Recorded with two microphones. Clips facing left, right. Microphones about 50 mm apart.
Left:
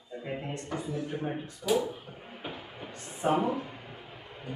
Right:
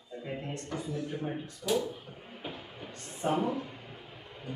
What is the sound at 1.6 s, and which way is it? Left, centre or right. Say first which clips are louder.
Speech: left 3 dB; centre.